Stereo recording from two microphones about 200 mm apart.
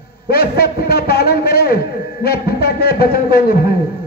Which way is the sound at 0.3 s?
50° left (ahead or behind).